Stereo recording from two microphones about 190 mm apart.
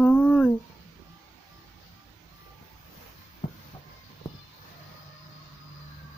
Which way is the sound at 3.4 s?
45° left (ahead or behind).